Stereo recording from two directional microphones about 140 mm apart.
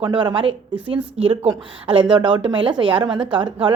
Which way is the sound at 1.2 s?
45° right (ahead or behind).